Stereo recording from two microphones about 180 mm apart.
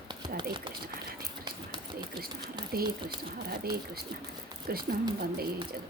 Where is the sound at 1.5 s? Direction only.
25° right (ahead or behind).